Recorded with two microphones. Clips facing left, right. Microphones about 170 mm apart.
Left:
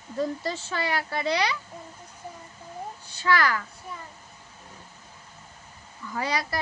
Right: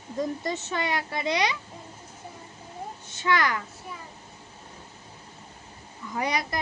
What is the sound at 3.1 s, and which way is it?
Speech, 20° right (ahead or behind).